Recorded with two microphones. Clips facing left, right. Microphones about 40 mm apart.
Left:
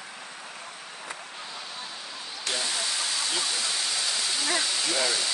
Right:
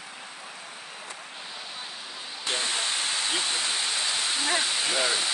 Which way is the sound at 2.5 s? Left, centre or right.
Right.